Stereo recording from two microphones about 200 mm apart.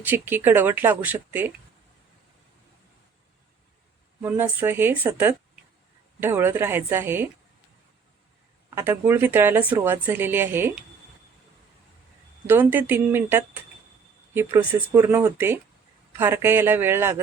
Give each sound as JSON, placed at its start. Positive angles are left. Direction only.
{"t": 0.0, "sound": "speech", "side_deg": -10}
{"t": 4.2, "sound": "speech", "side_deg": -10}
{"t": 8.7, "sound": "speech", "side_deg": -10}
{"t": 12.5, "sound": "speech", "side_deg": -10}